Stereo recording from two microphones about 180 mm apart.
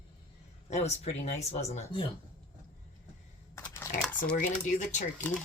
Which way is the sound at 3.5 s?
15° left (ahead or behind).